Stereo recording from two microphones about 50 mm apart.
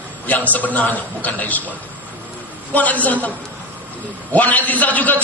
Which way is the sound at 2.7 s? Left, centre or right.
Left.